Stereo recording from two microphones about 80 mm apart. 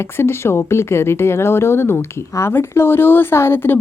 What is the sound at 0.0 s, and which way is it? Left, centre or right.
Speech, left.